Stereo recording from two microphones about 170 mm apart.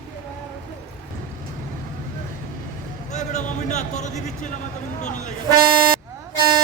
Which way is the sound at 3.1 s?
45° left (ahead or behind).